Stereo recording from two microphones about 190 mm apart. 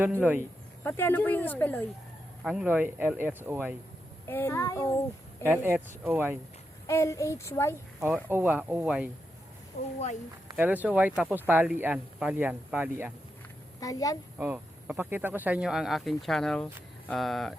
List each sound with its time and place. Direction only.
0.9 s speech: 10° left (ahead or behind)
2.4 s speech: 5° right (ahead or behind)
4.3 s speech: 10° left (ahead or behind)
5.4 s speech: 10° right (ahead or behind)
6.8 s speech: 15° left (ahead or behind)
7.9 s speech: 10° right (ahead or behind)
10.6 s speech: 10° right (ahead or behind)
13.7 s a woman's voice: 20° left (ahead or behind)
14.3 s speech: 10° right (ahead or behind)